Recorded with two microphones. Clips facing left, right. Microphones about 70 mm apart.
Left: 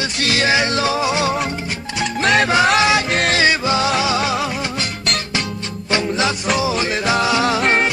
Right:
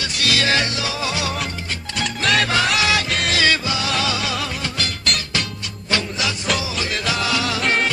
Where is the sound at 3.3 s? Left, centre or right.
Left.